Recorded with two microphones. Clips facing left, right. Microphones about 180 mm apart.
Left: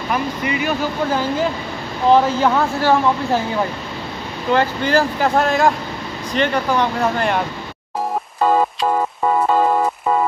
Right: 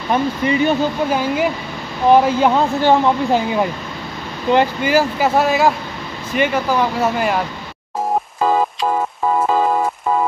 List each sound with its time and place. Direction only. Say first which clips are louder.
0.1 s speech: right 5 dB; 30° right (ahead or behind)
1.1 s speech: right 1 dB; 10° right (ahead or behind)
4.5 s speech: right 2 dB; 15° right (ahead or behind)